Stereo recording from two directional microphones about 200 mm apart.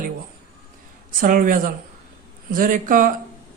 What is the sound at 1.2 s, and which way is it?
A man's voice, 45° right (ahead or behind).